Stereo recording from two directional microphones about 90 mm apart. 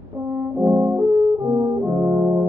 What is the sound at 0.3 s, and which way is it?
French horn, 25° right (ahead or behind).